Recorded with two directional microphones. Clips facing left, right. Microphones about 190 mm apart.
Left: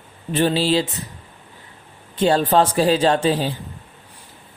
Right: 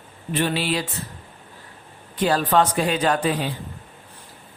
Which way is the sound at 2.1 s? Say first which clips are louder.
Left 3 dB; 25° left (ahead or behind).